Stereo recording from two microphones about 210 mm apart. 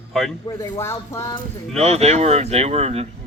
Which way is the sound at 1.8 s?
30° right (ahead or behind).